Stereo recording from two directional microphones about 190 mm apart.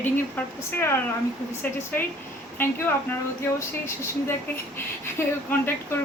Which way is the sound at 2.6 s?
10° left (ahead or behind).